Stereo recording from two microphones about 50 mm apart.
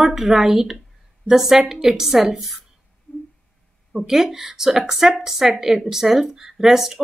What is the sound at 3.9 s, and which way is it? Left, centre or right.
A woman's voice, centre.